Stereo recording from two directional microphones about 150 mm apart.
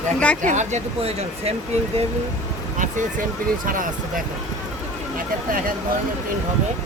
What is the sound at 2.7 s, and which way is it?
Speech, 55° right (ahead or behind).